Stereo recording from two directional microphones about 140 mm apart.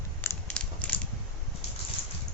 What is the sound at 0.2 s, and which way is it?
Crushing, 10° left (ahead or behind).